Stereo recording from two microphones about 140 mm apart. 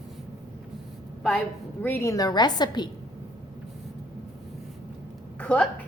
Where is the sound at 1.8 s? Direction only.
10° left (ahead or behind).